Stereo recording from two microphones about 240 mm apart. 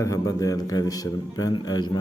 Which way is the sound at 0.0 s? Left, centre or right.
Centre.